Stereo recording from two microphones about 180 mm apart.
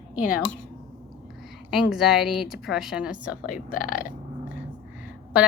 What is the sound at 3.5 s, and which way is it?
Speech, 50° left (ahead or behind).